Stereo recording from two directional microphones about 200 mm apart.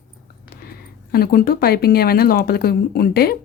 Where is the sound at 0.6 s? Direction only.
50° left (ahead or behind).